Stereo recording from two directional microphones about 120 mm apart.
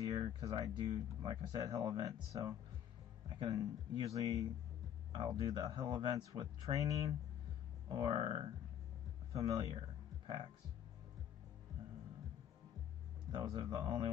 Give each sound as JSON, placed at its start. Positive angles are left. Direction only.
{"t": 0.5, "sound": "speech", "side_deg": -35}
{"t": 3.3, "sound": "speech", "side_deg": -45}
{"t": 3.5, "sound": "speech", "side_deg": -30}
{"t": 7.9, "sound": "speech", "side_deg": -45}
{"t": 9.3, "sound": "speech", "side_deg": -30}
{"t": 9.8, "sound": "a sound", "side_deg": -40}
{"t": 13.3, "sound": "speech", "side_deg": -40}